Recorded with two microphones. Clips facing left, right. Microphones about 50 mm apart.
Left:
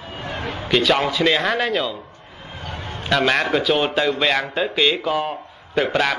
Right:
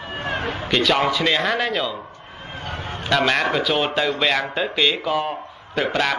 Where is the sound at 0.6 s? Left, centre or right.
Centre.